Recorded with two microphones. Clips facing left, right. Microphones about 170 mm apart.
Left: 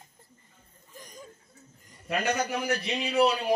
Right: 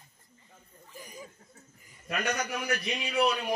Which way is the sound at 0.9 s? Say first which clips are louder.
Right 1 dB; 10° right (ahead or behind).